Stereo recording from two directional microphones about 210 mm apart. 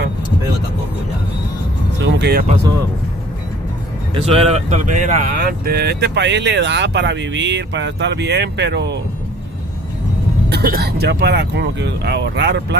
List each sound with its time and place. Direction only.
2.0 s music: 55° right (ahead or behind)
4.1 s speech: 30° right (ahead or behind); by 9.0 s 55° right (ahead or behind)
10.5 s speech: 50° right (ahead or behind)